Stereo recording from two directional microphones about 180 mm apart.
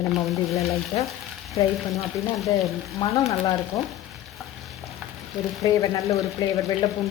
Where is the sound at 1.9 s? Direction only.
Centre (ahead or behind).